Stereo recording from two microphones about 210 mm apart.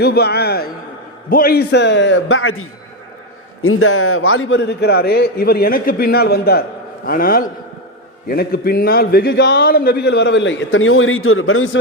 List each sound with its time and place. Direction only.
0.0 s a man's voice: 50° left (ahead or behind); by 11.8 s 75° left (ahead or behind)